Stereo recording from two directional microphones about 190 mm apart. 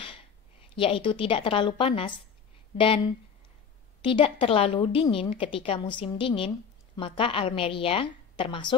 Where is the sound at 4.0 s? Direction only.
25° left (ahead or behind).